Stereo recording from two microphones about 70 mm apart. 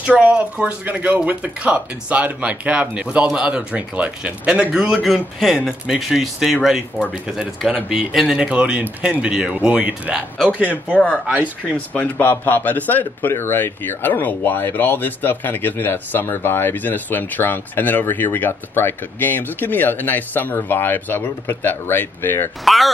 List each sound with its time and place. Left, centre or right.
0.0 s speech: right
5.0 s speech: centre
8.4 s speech: centre
11.7 s speech: centre